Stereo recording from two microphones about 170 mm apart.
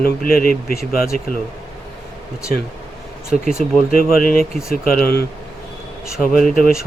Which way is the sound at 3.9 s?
55° left (ahead or behind).